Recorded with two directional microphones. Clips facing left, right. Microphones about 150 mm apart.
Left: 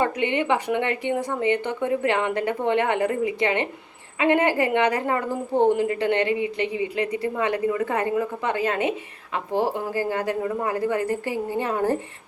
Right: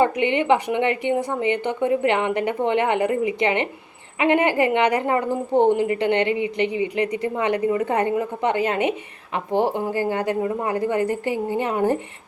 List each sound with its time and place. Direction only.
0.0 s a woman's voice: 15° right (ahead or behind)